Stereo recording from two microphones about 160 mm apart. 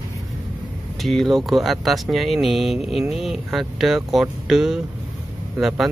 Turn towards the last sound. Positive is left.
turn(degrees=0)  # may be behind; listen again after turning